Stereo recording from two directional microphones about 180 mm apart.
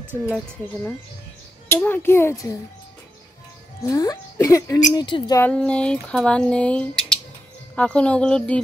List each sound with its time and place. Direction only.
0.1 s speech: 10° left (ahead or behind)
1.7 s speech: 10° left (ahead or behind)
3.8 s speech: 20° left (ahead or behind)
5.4 s speech: 5° left (ahead or behind)